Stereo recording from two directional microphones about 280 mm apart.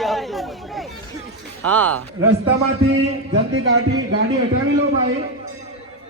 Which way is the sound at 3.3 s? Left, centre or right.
Right.